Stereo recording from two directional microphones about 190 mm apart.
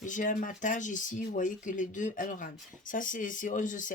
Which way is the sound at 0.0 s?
40° left (ahead or behind).